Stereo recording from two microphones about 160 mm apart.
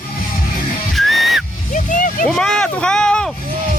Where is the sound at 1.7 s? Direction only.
55° left (ahead or behind).